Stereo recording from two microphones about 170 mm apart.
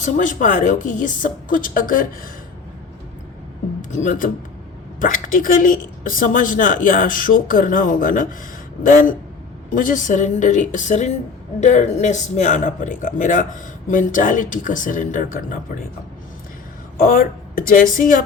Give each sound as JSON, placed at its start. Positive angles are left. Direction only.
{"t": 0.0, "sound": "speech", "side_deg": 50}
{"t": 3.8, "sound": "speech", "side_deg": 50}
{"t": 9.7, "sound": "speech", "side_deg": 50}
{"t": 17.0, "sound": "speech", "side_deg": 55}